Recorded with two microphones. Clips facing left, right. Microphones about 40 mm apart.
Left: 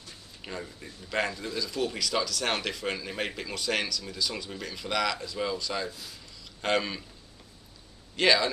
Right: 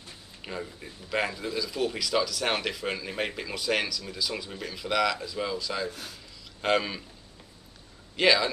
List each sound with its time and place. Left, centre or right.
0.4 s speech: centre
5.9 s speech: right
6.6 s speech: centre
8.2 s speech: centre